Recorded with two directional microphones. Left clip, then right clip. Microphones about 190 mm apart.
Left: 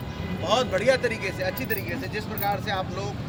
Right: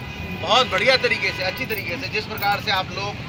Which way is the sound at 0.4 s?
10° left (ahead or behind).